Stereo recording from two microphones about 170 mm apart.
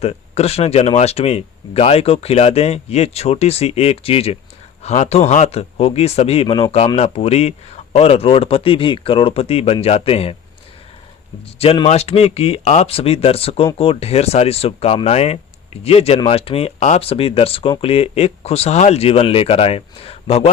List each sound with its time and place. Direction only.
0.0 s speech: 35° left (ahead or behind)
11.6 s speech: 35° left (ahead or behind)